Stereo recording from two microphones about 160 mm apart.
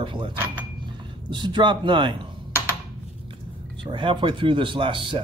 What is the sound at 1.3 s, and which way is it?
Speech, 30° right (ahead or behind).